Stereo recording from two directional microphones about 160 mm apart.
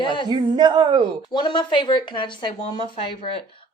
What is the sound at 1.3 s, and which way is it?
Speech, 30° left (ahead or behind).